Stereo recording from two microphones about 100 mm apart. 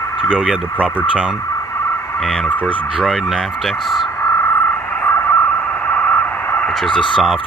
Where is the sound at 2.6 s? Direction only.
Centre (ahead or behind).